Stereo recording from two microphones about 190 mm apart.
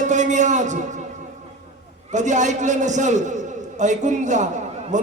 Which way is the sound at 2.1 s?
40° right (ahead or behind).